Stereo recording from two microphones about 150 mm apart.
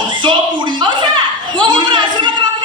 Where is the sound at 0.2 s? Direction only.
30° right (ahead or behind).